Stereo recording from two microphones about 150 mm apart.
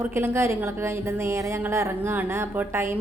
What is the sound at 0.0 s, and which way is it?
A woman's voice, 15° right (ahead or behind).